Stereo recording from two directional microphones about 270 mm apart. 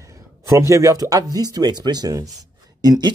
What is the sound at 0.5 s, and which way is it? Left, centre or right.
Speech, centre.